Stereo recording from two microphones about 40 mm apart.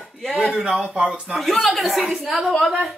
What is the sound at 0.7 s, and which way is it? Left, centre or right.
Speech, right.